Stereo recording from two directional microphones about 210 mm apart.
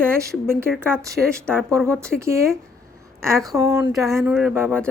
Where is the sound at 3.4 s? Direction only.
15° right (ahead or behind).